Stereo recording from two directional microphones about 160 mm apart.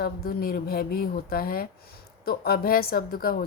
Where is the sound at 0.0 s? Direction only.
70° left (ahead or behind).